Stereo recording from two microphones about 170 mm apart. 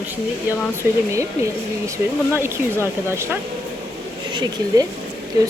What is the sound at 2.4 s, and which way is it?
Speech, 15° right (ahead or behind).